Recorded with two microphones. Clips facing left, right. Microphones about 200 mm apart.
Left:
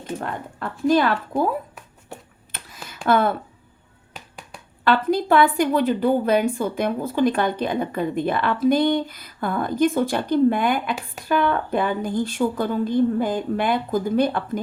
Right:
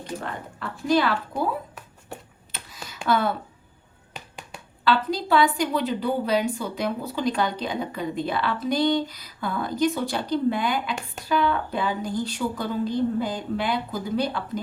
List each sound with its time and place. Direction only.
0.2 s a woman's voice: 50° left (ahead or behind)
2.1 s a sound: centre (ahead or behind)
3.1 s a woman's voice: 55° left (ahead or behind)
4.1 s finger snapping: centre (ahead or behind)
4.8 s a woman's voice: 55° left (ahead or behind)